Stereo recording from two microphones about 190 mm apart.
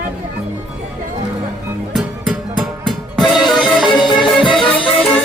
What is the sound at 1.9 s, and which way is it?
Music, 5° right (ahead or behind).